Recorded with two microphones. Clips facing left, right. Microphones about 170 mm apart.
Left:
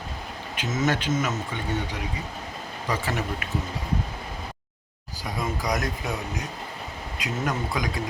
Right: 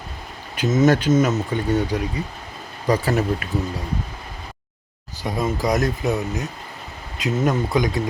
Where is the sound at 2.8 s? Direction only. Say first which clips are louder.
Right 9 dB; 40° right (ahead or behind).